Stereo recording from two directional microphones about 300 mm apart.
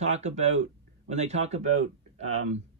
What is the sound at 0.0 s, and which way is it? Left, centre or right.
Speech, right.